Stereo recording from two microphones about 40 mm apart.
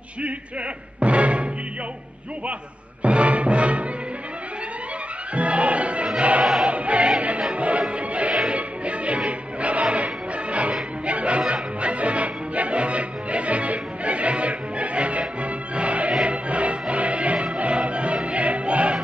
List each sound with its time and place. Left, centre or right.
0.9 s music: right
3.0 s music: right
5.3 s music: right